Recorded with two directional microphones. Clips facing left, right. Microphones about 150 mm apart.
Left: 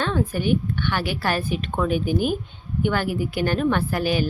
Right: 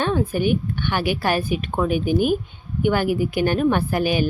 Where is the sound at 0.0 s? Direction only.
15° right (ahead or behind).